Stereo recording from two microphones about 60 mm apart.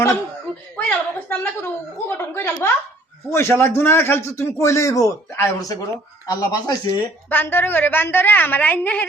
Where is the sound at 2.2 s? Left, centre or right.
Left.